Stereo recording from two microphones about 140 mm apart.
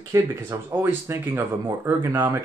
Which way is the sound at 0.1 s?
15° right (ahead or behind).